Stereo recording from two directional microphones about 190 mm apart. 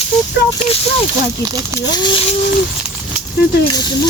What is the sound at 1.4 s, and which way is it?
Speech, 20° right (ahead or behind).